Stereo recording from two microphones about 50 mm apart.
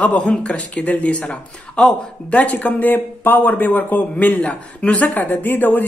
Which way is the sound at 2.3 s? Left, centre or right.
Left.